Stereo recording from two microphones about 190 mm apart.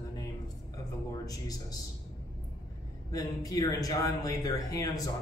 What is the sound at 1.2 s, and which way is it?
Speech, 20° left (ahead or behind).